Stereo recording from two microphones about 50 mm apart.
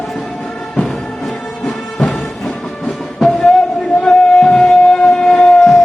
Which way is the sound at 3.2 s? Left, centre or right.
Centre.